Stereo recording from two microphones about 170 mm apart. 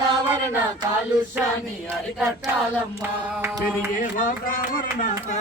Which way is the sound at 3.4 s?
15° right (ahead or behind).